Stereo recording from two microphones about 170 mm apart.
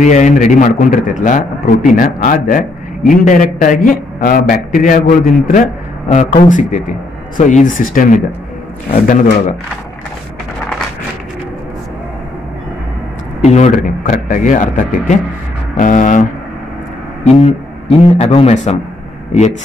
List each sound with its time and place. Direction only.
0.0 s a man's voice: 45° left (ahead or behind)
13.4 s a man's voice: 40° left (ahead or behind)
17.4 s a man's voice: 40° left (ahead or behind)